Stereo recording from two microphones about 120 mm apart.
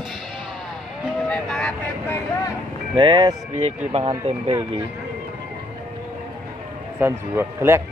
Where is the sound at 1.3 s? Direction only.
5° left (ahead or behind).